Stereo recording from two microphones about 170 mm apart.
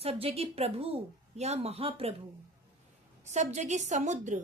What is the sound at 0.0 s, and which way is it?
A woman's voice, 35° right (ahead or behind).